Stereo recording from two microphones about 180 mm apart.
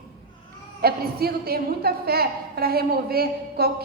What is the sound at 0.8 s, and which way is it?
A woman's voice, 60° right (ahead or behind).